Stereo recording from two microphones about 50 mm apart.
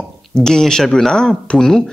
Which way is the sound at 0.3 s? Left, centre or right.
Centre.